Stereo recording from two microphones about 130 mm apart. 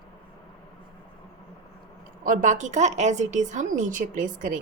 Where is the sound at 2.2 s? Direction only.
80° right.